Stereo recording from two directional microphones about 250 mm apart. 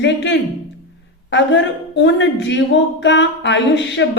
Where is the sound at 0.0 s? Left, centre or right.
Left.